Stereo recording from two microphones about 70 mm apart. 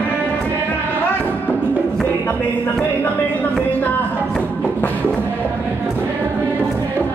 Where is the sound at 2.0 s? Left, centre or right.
Left.